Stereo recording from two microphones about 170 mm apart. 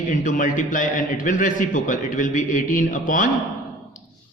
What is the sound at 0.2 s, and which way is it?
A man's voice, 50° left (ahead or behind).